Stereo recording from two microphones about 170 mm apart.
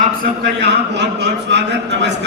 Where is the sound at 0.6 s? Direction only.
85° right.